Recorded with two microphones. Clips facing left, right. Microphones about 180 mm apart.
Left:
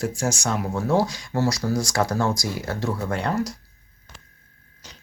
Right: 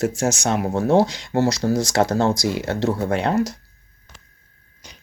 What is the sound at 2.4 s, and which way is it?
Speech, 70° right (ahead or behind).